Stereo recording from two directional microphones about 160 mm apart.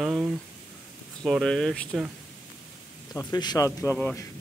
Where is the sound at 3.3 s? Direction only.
25° left (ahead or behind).